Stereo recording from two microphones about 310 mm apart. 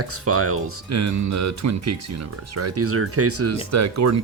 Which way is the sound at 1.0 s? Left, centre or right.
Right.